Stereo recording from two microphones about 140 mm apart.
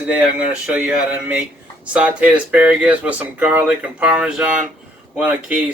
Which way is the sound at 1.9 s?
10° right (ahead or behind).